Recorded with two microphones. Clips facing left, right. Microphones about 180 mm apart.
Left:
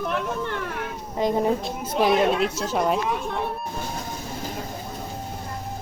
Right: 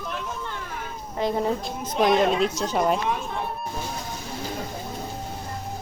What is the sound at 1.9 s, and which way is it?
Speech, 5° left (ahead or behind).